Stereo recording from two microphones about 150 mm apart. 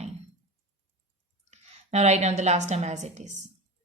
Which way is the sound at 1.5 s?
45° right (ahead or behind).